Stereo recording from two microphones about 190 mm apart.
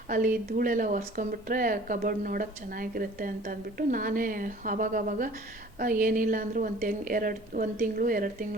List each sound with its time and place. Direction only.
0.1 s speech: 45° right (ahead or behind)